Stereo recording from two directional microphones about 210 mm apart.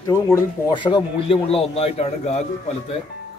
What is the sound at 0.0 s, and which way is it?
Speech, 15° left (ahead or behind).